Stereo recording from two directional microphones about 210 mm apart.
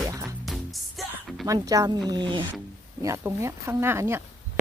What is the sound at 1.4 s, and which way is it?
Speech, 15° right (ahead or behind).